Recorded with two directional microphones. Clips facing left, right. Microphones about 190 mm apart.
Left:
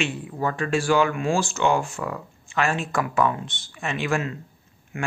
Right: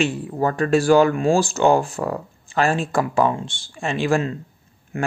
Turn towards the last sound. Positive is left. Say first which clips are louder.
# right 5 dB
turn(degrees=-35)  # may be behind; listen again after turning